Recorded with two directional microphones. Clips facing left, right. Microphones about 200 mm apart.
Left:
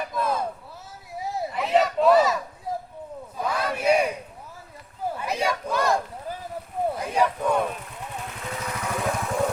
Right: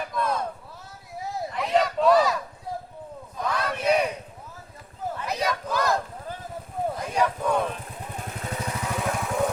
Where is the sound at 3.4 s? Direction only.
5° left (ahead or behind).